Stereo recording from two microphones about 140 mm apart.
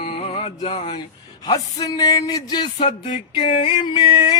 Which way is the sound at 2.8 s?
35° left (ahead or behind).